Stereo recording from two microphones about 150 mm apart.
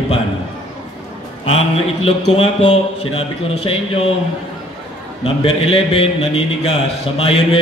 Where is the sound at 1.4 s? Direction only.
40° left (ahead or behind).